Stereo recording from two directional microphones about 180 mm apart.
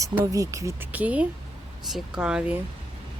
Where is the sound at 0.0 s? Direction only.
20° right (ahead or behind).